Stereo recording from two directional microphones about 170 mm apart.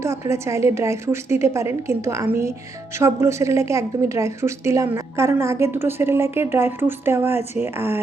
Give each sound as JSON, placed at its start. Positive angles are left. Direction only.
{"t": 0.0, "sound": "a woman's voice", "side_deg": -15}